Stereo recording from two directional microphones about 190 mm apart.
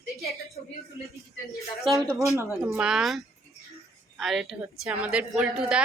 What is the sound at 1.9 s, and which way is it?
A woman's voice, 15° right (ahead or behind).